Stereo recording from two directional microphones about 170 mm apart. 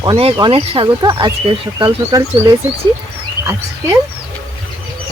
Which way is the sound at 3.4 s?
15° right (ahead or behind).